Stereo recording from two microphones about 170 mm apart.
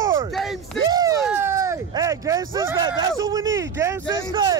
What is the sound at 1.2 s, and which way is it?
Speech, 10° right (ahead or behind).